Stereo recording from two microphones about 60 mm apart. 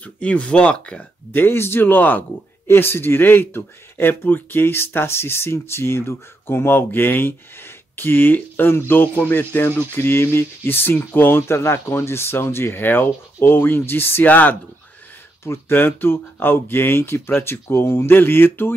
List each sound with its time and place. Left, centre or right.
0.0 s speech: left
1.3 s speech: left
14.2 s speech: left
15.4 s speech: left